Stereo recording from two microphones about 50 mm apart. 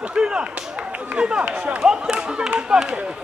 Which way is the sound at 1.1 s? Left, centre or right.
Centre.